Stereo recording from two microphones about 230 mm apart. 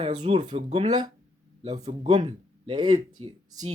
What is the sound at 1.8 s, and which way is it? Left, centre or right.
Speech, centre.